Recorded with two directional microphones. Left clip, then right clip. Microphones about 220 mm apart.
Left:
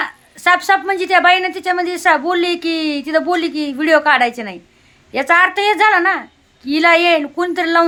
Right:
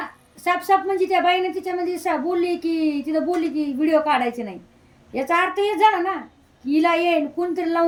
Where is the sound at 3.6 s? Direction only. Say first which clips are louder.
Left 6 dB; 45° left (ahead or behind).